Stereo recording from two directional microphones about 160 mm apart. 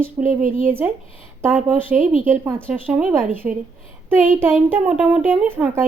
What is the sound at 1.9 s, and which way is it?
Speech, 50° right (ahead or behind).